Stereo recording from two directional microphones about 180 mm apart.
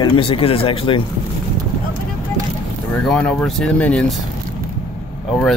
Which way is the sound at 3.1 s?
5° left (ahead or behind).